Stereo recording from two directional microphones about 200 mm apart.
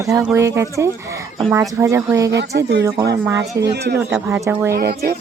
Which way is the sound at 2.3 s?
55° right (ahead or behind).